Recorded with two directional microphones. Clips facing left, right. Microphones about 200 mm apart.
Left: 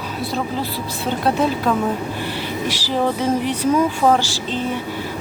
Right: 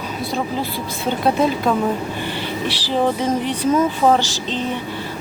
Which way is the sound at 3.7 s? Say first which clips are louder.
Right 1 dB; centre (ahead or behind).